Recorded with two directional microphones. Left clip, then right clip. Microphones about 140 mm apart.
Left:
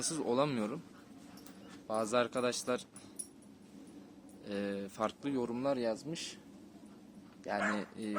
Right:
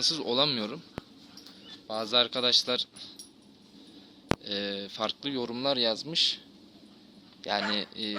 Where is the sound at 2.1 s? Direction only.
5° left (ahead or behind).